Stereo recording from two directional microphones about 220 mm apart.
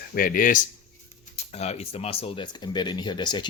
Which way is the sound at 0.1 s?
40° left (ahead or behind).